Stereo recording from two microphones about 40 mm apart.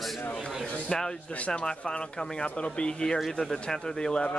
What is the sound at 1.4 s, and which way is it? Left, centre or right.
Speech, left.